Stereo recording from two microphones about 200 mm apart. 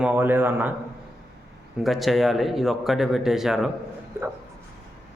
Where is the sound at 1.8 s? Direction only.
Centre (ahead or behind).